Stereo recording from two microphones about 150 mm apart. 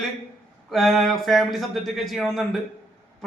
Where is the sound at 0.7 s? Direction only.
Centre (ahead or behind).